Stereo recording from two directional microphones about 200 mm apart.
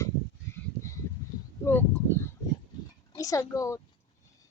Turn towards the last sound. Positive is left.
turn(degrees=15)  # may be behind; listen again after turning